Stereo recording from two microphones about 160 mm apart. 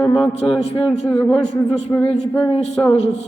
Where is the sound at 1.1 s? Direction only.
5° left (ahead or behind).